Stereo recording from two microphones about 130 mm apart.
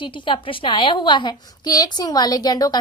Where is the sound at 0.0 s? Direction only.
40° left (ahead or behind).